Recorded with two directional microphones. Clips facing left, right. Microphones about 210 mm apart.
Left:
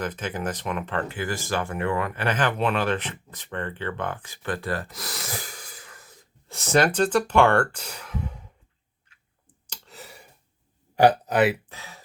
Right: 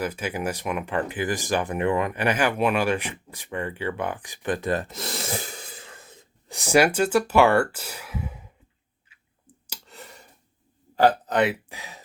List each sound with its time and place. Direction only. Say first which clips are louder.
0.0 s speech: right 2 dB; 10° right (ahead or behind)
9.6 s clicking: even; centre (ahead or behind)
10.9 s burping: left 1 dB; 10° left (ahead or behind)
11.7 s a sound: right 2 dB; 15° right (ahead or behind)